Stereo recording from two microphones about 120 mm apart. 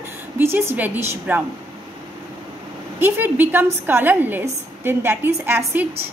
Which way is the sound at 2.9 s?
15° right (ahead or behind).